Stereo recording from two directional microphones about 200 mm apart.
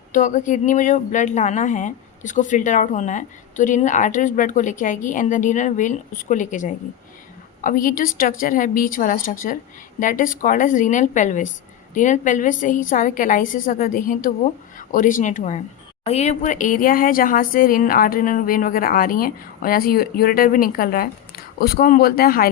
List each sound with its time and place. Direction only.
0.1 s a woman's voice: 40° left (ahead or behind)